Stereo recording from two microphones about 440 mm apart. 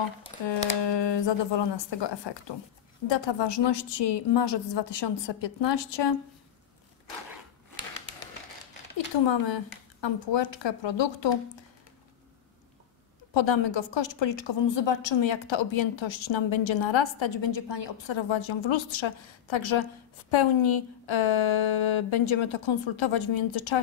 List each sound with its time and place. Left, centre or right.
0.7 s a woman's voice: left
8.9 s a woman's voice: left
13.3 s a woman's voice: left